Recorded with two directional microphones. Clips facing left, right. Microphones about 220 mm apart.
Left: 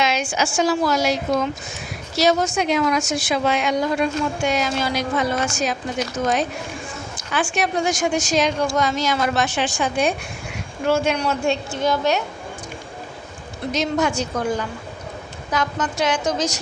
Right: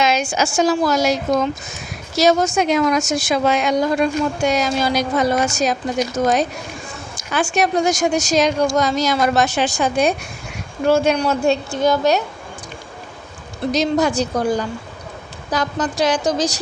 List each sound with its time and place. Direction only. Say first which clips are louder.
0.0 s a woman's voice: right 3 dB; 40° right (ahead or behind)
7.2 s a woman's voice: right 4 dB; 40° right (ahead or behind)
13.7 s a woman's voice: right 4 dB; 35° right (ahead or behind)